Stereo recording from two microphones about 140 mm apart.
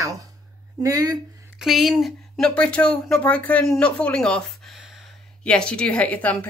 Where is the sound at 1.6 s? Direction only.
Centre (ahead or behind).